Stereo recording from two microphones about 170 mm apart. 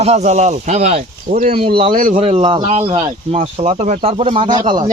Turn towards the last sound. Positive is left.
turn(degrees=-30)  # may be behind; listen again after turning